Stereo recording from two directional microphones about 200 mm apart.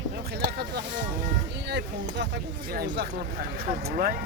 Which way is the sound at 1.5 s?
60° right (ahead or behind).